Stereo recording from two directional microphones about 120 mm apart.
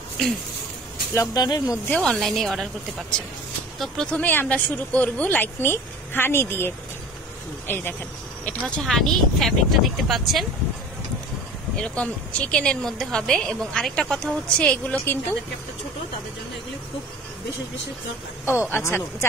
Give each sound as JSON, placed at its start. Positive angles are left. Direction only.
{"t": 1.1, "sound": "speech", "side_deg": 30}
{"t": 1.9, "sound": "speech", "side_deg": 5}
{"t": 3.8, "sound": "a woman's voice", "side_deg": 5}
{"t": 8.5, "sound": "speech", "side_deg": 5}
{"t": 11.7, "sound": "a woman's voice", "side_deg": 10}
{"t": 18.4, "sound": "speech", "side_deg": 20}